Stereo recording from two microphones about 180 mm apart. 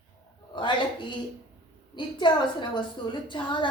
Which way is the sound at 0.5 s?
25° left (ahead or behind).